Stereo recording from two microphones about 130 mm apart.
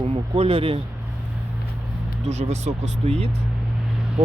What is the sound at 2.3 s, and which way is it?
Speech, 55° right (ahead or behind).